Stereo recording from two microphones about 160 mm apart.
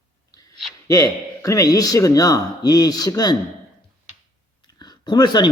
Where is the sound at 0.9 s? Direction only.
20° left (ahead or behind).